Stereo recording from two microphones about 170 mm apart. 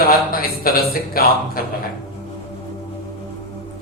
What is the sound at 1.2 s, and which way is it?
Speech, 60° left (ahead or behind).